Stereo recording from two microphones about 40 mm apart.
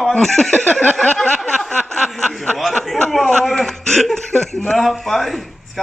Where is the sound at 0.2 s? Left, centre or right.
Centre.